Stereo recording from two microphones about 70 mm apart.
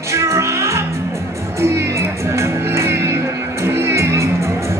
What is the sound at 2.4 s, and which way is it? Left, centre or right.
Music, right.